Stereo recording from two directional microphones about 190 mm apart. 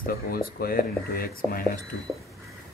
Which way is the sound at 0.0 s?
50° left (ahead or behind).